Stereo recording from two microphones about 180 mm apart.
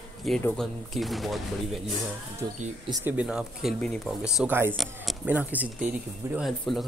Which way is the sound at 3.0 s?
5° right (ahead or behind).